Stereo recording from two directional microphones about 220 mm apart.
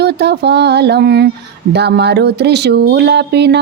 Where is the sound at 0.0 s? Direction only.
50° right (ahead or behind).